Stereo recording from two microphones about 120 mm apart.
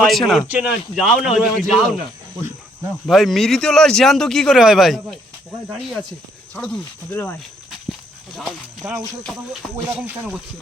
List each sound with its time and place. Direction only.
0.0 s speech: centre (ahead or behind)
3.1 s speech: centre (ahead or behind)
7.1 s speech: 15° left (ahead or behind)
8.8 s speech: 15° right (ahead or behind)